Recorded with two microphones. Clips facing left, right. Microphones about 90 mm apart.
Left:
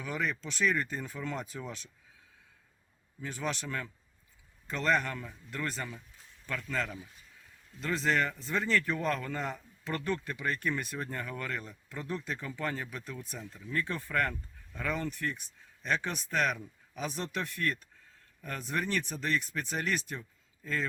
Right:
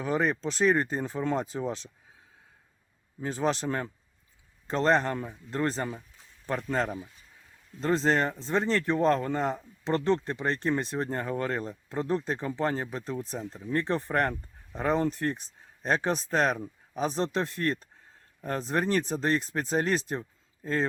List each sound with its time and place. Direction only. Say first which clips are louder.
0.0 s speech: right 8 dB; 35° right (ahead or behind)
3.2 s speech: right 8 dB; 35° right (ahead or behind)